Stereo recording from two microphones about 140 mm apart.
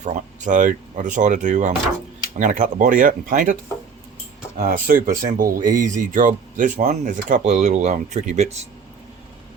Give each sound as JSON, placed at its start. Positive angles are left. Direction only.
{"t": 0.0, "sound": "speech", "side_deg": -65}